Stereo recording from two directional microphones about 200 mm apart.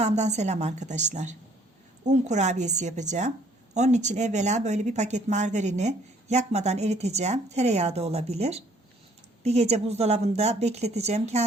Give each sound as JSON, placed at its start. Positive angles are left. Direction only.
{"t": 0.0, "sound": "speech", "side_deg": -35}